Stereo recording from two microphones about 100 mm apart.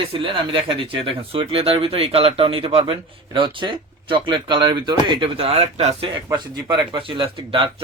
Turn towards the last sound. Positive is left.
turn(degrees=-60)  # may be behind; listen again after turning